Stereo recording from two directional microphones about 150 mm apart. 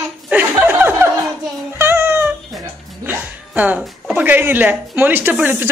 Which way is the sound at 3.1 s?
10° right (ahead or behind).